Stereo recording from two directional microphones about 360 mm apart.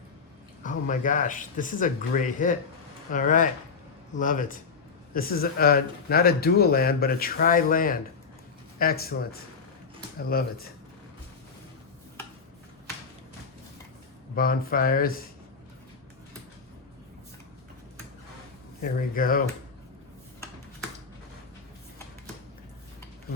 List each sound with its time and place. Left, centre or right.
0.6 s speech: left
10.2 s speech: left
14.3 s speech: left
18.8 s speech: left